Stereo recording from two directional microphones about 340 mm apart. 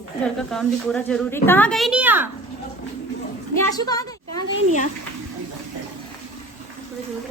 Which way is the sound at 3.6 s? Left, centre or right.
Centre.